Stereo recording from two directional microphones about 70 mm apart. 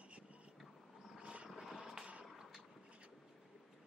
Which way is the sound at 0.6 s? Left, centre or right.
Centre.